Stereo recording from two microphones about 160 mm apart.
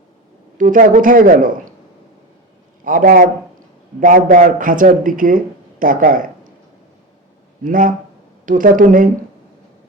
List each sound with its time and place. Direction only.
0.5 s speech: 55° right (ahead or behind)
2.8 s speech: 60° right (ahead or behind)
7.6 s speech: 60° right (ahead or behind)